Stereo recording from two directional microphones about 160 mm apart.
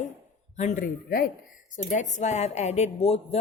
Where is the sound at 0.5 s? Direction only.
45° left (ahead or behind).